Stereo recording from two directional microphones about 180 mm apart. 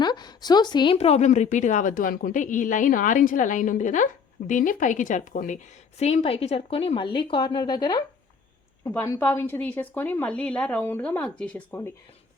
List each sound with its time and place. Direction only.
0.0 s speech: 25° left (ahead or behind); by 5.5 s 45° left (ahead or behind)
6.0 s a woman's voice: 35° left (ahead or behind); by 11.9 s 10° left (ahead or behind)